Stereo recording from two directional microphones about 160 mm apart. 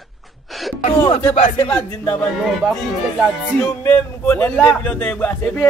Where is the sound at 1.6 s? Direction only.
10° left (ahead or behind).